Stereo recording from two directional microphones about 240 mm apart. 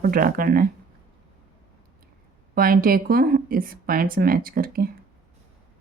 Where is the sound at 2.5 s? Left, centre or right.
Right.